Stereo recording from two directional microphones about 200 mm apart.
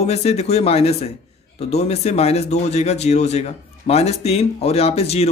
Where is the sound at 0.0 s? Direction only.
30° left (ahead or behind).